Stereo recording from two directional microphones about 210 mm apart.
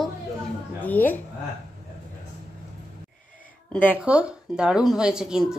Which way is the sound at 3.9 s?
5° right (ahead or behind).